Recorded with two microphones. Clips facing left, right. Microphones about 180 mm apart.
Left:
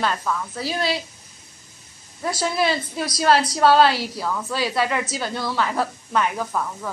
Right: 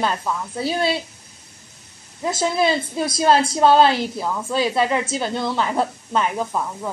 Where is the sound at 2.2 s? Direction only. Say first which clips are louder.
Right 3 dB; 20° right (ahead or behind).